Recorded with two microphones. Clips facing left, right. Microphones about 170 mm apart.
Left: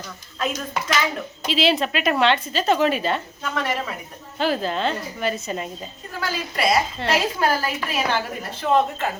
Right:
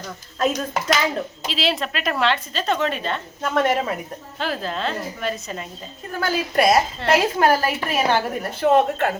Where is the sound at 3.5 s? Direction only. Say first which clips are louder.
Right 6 dB; 50° right (ahead or behind).